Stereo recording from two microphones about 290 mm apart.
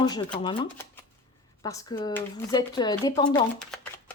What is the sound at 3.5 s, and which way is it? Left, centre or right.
Shuffling cards, centre.